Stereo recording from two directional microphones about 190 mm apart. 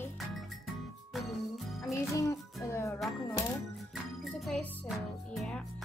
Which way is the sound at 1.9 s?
15° left (ahead or behind).